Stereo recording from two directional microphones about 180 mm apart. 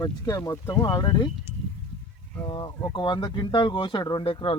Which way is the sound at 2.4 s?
25° left (ahead or behind).